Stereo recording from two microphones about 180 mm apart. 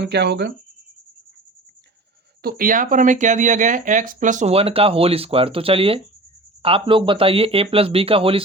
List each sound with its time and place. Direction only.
0.0 s speech: 70° right (ahead or behind)
2.4 s speech: 55° right (ahead or behind); by 8.4 s 30° right (ahead or behind)